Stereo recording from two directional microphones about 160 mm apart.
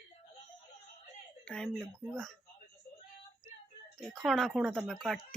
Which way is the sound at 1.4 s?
5° left (ahead or behind).